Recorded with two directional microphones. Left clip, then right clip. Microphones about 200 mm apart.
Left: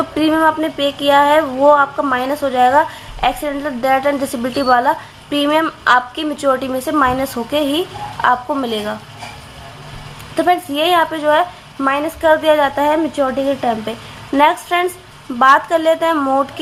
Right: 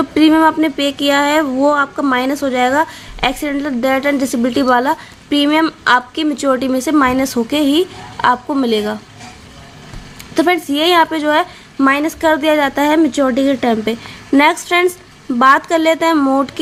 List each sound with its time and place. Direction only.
0.1 s speech: 50° right (ahead or behind)
10.3 s a woman's voice: 45° right (ahead or behind)
14.3 s a woman's voice: 45° right (ahead or behind)